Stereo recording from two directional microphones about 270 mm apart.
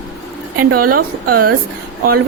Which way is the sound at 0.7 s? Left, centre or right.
Right.